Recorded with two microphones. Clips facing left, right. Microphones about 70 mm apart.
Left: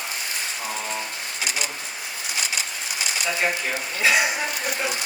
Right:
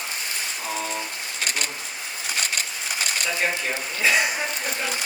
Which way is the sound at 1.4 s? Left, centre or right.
Right.